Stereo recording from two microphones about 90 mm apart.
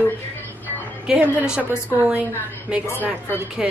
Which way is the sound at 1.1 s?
15° right (ahead or behind).